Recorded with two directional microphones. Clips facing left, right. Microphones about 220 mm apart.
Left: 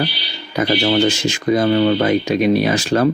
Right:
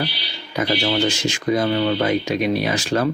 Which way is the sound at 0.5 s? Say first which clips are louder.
Left 4 dB; 45° left (ahead or behind).